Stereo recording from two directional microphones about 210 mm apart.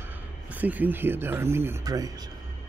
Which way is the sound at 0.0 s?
10° right (ahead or behind).